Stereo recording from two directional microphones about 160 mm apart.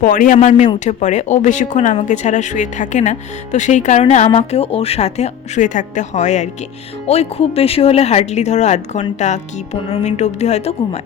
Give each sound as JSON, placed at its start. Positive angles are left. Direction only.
{"t": 0.0, "sound": "a man's voice", "side_deg": 60}
{"t": 0.3, "sound": "speech", "side_deg": 45}